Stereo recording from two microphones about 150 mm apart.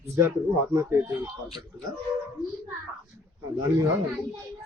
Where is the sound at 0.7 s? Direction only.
20° right (ahead or behind).